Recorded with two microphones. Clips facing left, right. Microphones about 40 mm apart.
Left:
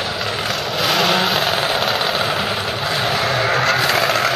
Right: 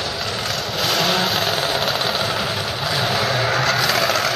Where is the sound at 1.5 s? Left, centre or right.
Centre.